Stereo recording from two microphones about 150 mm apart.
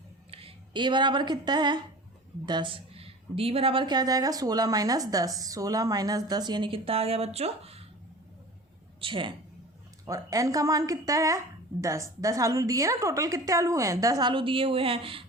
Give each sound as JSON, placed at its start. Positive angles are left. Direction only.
{"t": 0.3, "sound": "a woman's voice", "side_deg": -40}
{"t": 9.0, "sound": "a woman's voice", "side_deg": -35}
{"t": 10.1, "sound": "a woman's voice", "side_deg": -25}